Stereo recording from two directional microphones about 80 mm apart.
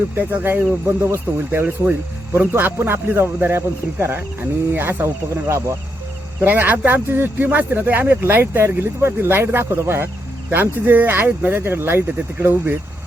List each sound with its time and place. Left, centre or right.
0.2 s speech: right
1.5 s speech: right
6.4 s speech: right